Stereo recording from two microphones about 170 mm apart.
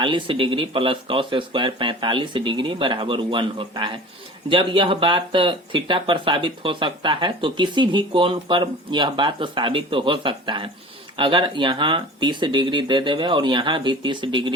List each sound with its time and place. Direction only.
0.0 s speech: 30° right (ahead or behind)